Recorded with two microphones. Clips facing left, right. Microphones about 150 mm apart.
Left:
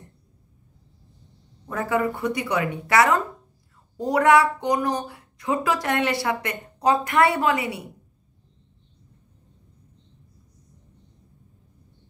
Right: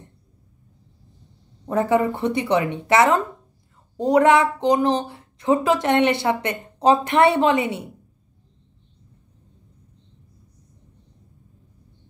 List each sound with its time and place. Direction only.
1.7 s a woman's voice: 25° right (ahead or behind)